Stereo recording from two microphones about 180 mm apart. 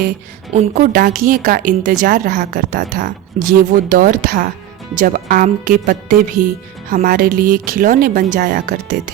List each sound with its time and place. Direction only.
0.5 s a woman's voice: 40° right (ahead or behind)